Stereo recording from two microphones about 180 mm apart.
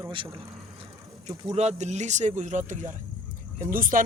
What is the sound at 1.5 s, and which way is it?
Speech, 40° right (ahead or behind).